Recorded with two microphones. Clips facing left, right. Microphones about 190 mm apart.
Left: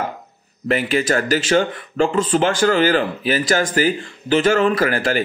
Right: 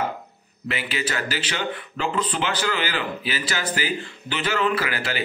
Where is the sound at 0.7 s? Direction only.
45° left (ahead or behind).